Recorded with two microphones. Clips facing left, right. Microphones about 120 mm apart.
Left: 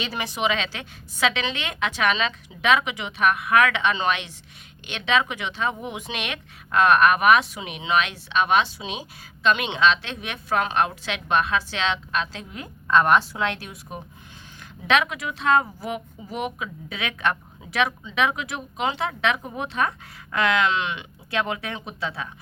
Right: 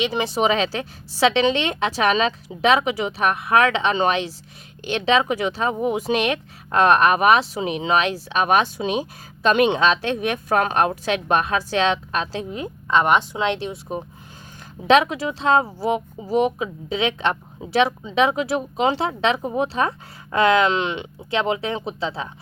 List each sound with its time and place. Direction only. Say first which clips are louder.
0.0 s speech: right 6 dB; 25° right (ahead or behind)
12.5 s speech: even; 20° right (ahead or behind)